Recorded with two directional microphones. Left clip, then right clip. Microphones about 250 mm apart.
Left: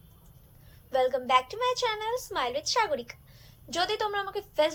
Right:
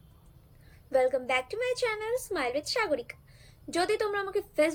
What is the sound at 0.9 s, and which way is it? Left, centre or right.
A woman's voice, centre.